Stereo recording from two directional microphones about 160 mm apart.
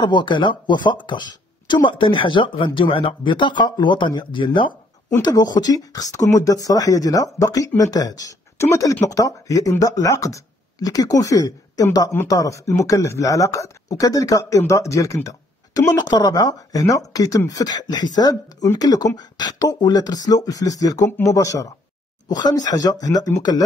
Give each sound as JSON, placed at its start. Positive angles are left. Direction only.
{"t": 0.0, "sound": "speech", "side_deg": 30}